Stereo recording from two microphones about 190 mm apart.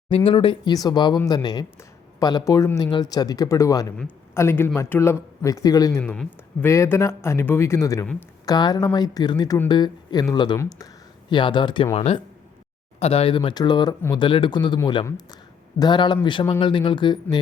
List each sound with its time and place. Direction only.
0.1 s speech: 25° left (ahead or behind)